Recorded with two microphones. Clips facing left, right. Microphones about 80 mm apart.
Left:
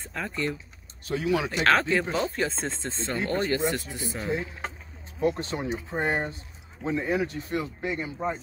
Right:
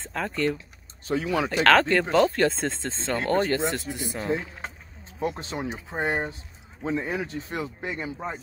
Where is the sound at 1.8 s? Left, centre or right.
Right.